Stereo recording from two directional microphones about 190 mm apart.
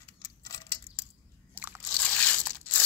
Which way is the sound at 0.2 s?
15° left (ahead or behind).